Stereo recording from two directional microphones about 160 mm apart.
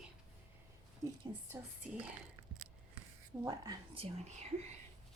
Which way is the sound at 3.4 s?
20° right (ahead or behind).